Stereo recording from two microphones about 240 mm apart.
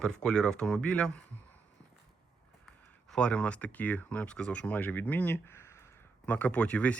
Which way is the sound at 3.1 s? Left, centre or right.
Centre.